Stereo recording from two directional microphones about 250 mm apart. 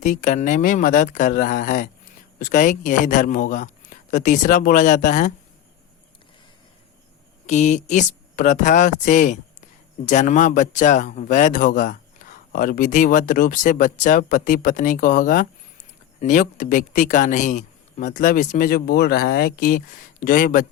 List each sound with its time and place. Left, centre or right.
0.0 s a man's voice: left
7.4 s a man's voice: left